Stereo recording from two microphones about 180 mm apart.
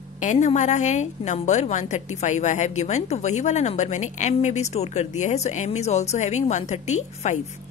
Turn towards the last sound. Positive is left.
turn(degrees=40)  # may be behind; listen again after turning